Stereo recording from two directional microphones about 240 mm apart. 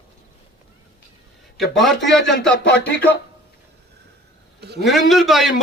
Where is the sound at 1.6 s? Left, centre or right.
Centre.